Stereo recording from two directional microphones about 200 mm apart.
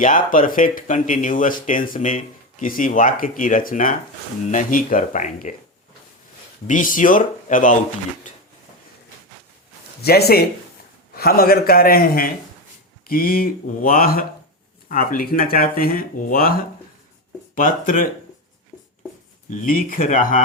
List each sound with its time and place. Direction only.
0.0 s speech: 40° left (ahead or behind)
6.7 s speech: 40° left (ahead or behind)
10.0 s speech: 50° left (ahead or behind)
19.5 s speech: 45° left (ahead or behind)